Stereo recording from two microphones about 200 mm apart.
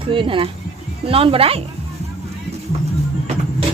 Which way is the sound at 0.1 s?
25° right (ahead or behind).